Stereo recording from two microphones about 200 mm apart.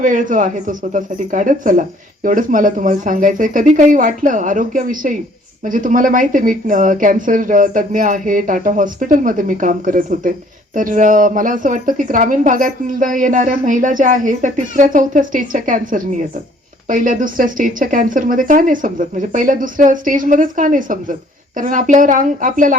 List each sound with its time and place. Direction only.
0.0 s speech: 40° right (ahead or behind)